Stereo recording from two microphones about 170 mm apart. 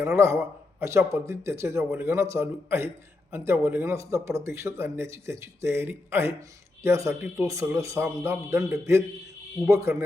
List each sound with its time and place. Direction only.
0.0 s speech: 15° right (ahead or behind)